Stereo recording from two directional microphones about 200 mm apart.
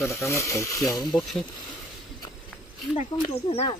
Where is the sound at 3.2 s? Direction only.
30° left (ahead or behind).